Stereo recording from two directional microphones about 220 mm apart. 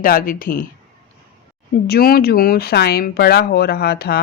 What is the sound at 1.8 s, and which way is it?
Speech, 45° left (ahead or behind).